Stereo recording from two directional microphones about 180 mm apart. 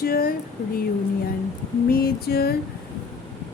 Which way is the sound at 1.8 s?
55° left (ahead or behind).